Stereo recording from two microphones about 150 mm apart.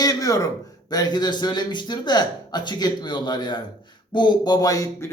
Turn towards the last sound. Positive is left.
turn(degrees=20)  # may be behind; listen again after turning